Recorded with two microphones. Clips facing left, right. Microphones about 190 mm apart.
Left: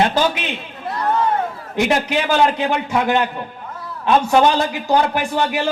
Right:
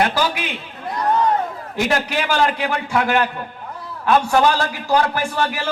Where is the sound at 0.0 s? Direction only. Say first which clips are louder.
Left 2 dB; 20° left (ahead or behind).